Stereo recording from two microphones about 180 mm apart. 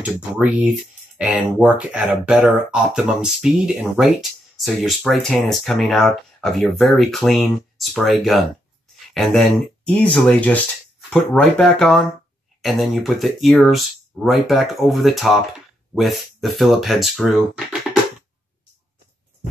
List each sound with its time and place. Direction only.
0.0 s speech: 5° right (ahead or behind)